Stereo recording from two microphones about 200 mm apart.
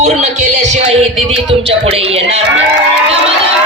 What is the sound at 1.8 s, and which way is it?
Speech, 30° right (ahead or behind).